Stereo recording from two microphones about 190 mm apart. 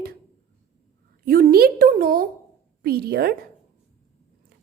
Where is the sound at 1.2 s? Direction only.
50° right (ahead or behind).